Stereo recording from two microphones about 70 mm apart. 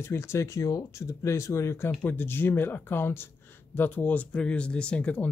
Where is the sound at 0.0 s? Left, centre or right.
Left.